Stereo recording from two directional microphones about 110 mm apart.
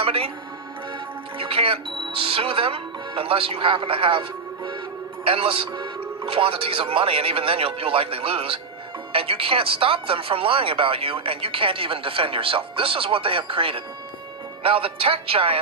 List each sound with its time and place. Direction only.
0.0 s speech: 60° right (ahead or behind)
1.4 s speech: 55° right (ahead or behind)